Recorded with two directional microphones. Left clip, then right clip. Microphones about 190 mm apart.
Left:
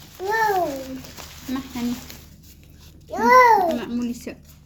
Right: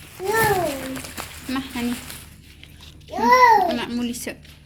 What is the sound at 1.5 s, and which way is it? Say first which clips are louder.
Speech: right 1 dB; centre (ahead or behind).